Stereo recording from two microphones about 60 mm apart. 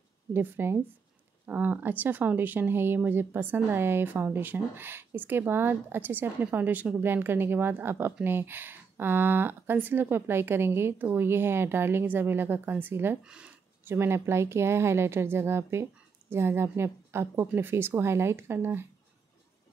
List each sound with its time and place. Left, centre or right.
0.3 s speech: right
13.2 s speech: centre
13.8 s speech: right